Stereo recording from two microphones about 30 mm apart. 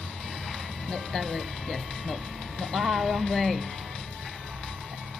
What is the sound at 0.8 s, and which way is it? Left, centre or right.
Speech, centre.